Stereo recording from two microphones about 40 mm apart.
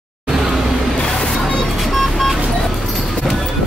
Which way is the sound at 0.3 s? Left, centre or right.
Centre.